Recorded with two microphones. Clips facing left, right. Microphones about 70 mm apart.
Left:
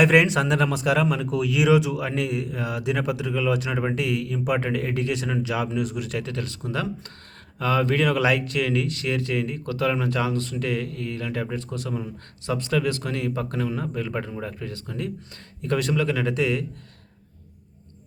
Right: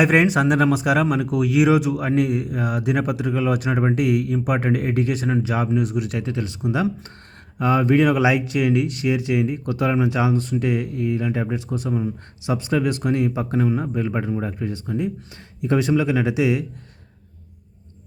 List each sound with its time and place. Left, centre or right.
0.7 s speech: centre
0.9 s a man's voice: right
4.8 s speech: right
6.2 s speech: centre